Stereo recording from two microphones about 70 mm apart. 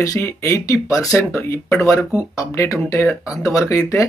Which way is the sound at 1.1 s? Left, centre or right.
Left.